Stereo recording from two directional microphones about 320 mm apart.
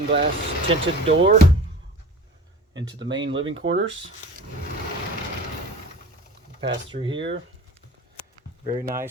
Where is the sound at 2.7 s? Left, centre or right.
Centre.